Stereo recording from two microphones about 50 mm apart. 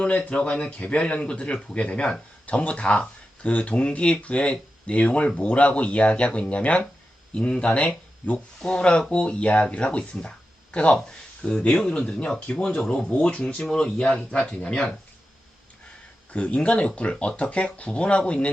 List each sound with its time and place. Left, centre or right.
0.3 s speech: left
10.2 s a sound: left
11.4 s speech: centre
16.3 s speech: left